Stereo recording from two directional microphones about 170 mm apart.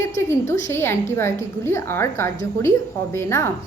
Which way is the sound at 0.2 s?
15° left (ahead or behind).